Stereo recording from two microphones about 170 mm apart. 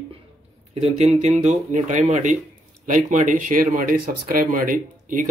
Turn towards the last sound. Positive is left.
turn(degrees=-50)  # may be behind; listen again after turning